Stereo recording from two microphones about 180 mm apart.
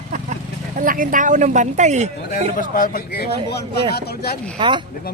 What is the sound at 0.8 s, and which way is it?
Speech, 50° right (ahead or behind).